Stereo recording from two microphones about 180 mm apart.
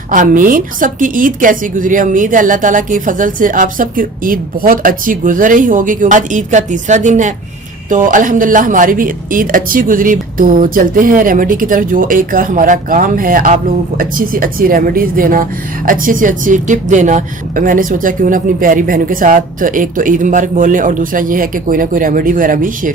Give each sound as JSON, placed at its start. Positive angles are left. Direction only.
{"t": 0.1, "sound": "a woman's voice", "side_deg": -50}